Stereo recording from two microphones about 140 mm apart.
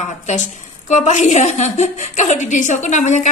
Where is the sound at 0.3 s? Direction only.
55° left (ahead or behind).